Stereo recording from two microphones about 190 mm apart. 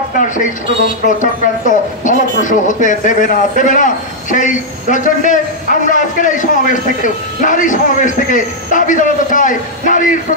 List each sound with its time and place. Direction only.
1.2 s speech: 40° left (ahead or behind)